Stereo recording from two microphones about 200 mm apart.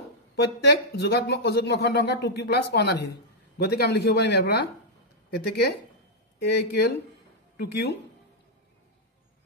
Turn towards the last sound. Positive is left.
turn(degrees=55)  # may be behind; listen again after turning